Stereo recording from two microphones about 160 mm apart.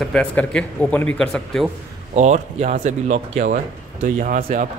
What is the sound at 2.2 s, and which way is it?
Speech, 45° right (ahead or behind).